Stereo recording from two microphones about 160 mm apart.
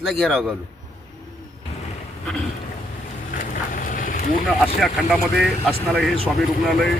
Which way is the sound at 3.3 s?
55° left (ahead or behind).